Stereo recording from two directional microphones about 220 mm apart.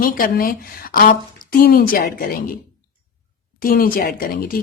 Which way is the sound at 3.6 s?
40° left (ahead or behind).